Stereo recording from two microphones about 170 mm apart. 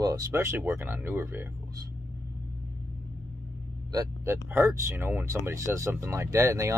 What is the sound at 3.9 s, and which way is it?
Speech, 20° right (ahead or behind).